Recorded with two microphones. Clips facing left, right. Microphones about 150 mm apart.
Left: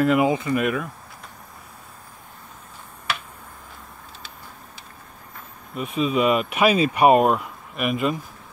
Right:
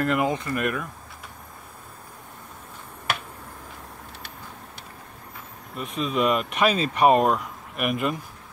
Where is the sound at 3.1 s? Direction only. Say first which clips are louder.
Even; 50° right (ahead or behind).